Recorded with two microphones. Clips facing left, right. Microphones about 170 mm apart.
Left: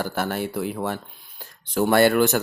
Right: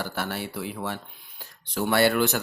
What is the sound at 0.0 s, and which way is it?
Speech, 45° left (ahead or behind).